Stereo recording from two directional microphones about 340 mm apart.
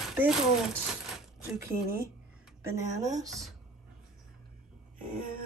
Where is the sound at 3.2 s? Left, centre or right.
Centre.